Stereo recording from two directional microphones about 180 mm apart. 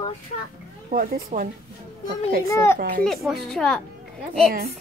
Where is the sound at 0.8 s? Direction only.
50° right (ahead or behind).